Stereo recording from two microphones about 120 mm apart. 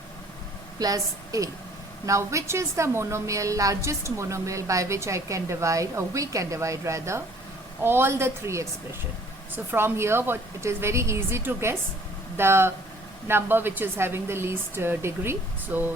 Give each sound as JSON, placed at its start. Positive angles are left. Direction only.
{"t": 0.8, "sound": "a woman's voice", "side_deg": -30}
{"t": 9.7, "sound": "a woman's voice", "side_deg": -20}